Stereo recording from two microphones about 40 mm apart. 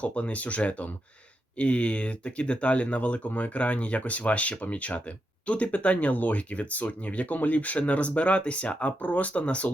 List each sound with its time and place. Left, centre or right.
0.0 s speech: left